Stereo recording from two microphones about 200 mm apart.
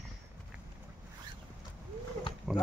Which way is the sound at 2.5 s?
5° right (ahead or behind).